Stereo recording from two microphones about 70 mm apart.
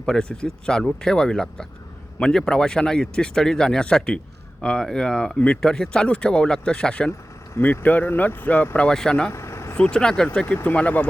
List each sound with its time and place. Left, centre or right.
0.0 s speech: centre
7.5 s speech: left
8.9 s speech: centre
9.3 s vehicle: left
9.7 s speech: centre
10.5 s speech: left